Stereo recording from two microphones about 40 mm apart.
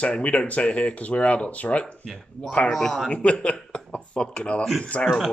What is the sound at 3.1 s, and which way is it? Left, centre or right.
Speech, left.